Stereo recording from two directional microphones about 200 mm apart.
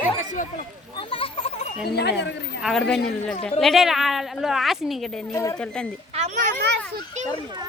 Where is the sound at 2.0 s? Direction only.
55° left (ahead or behind).